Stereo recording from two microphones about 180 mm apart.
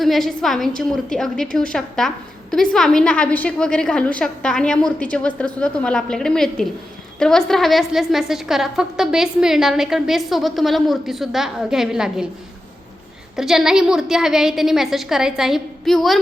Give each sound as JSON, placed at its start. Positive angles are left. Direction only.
{"t": 0.0, "sound": "a woman's voice", "side_deg": 0}
{"t": 13.3, "sound": "a woman's voice", "side_deg": 0}